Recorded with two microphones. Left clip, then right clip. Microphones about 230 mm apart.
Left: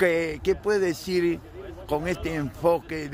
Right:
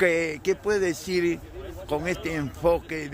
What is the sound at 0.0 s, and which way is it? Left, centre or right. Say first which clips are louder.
A man's voice: even; centre.